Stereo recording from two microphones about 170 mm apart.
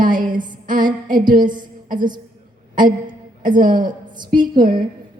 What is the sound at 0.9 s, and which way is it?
Music, 50° right (ahead or behind).